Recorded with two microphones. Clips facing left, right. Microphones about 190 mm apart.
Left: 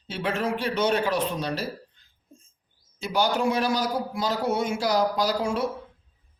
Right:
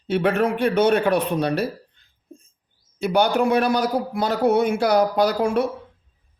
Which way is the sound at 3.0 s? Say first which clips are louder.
Right 6 dB; 60° right (ahead or behind).